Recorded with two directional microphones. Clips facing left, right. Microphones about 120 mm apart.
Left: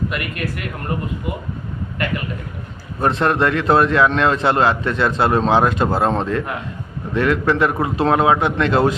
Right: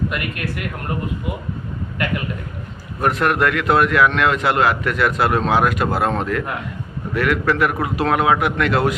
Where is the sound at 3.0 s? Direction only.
25° left (ahead or behind).